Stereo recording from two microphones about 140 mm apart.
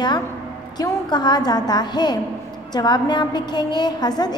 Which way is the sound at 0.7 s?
30° left (ahead or behind).